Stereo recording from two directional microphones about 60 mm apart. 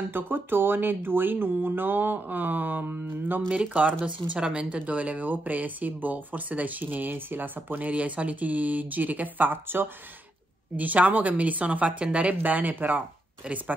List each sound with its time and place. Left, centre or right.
0.1 s speech: right